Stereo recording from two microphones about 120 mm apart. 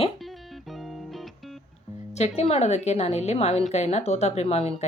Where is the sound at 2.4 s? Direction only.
60° left (ahead or behind).